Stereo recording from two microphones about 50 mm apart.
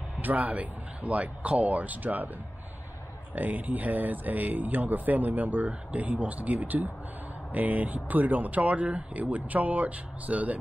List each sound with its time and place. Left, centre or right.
0.2 s speech: right
3.3 s speech: right